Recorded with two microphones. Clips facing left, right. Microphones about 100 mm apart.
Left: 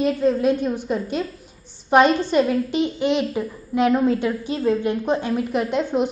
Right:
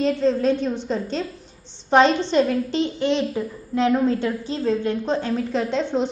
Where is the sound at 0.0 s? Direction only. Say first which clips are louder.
Left 1 dB; 10° left (ahead or behind).